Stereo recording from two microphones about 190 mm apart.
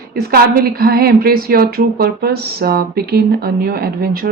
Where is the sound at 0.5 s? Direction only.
55° right (ahead or behind).